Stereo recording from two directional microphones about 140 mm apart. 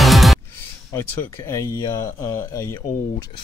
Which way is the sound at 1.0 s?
20° left (ahead or behind).